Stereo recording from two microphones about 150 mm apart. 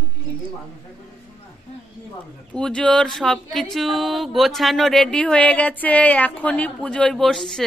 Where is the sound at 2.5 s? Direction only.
5° left (ahead or behind).